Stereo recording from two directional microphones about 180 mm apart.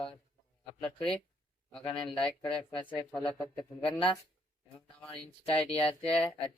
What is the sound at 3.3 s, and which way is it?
Speech, 30° left (ahead or behind).